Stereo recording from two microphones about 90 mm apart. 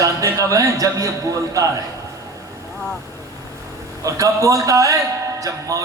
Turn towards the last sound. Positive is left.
turn(degrees=-40)  # may be behind; listen again after turning